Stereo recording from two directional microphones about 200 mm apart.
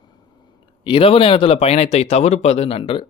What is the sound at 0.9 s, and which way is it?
Speech, 25° left (ahead or behind).